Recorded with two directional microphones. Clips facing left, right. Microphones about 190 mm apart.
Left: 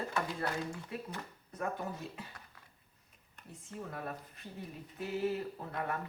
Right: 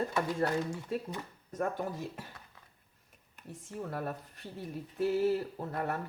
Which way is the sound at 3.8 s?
45° right (ahead or behind).